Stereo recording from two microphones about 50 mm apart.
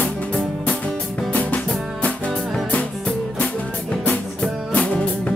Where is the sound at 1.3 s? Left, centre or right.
Left.